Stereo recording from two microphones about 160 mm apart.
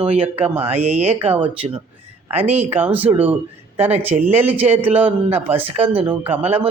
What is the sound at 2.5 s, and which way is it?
Speech, 40° right (ahead or behind).